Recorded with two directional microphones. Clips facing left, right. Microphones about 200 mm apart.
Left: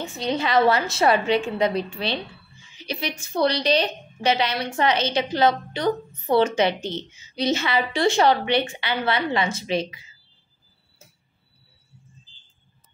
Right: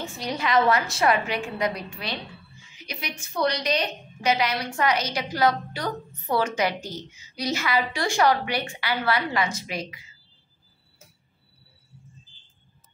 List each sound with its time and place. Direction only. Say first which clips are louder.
0.0 s a woman's voice: left 4 dB; 25° left (ahead or behind)